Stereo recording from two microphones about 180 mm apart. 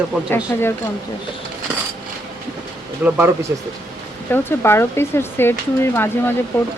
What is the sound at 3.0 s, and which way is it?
Speech, 10° right (ahead or behind).